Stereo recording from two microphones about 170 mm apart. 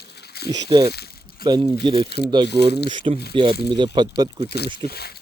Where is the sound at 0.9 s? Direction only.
70° left (ahead or behind).